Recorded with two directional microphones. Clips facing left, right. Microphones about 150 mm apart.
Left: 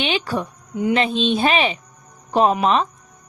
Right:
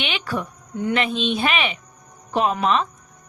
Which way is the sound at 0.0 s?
30° left (ahead or behind).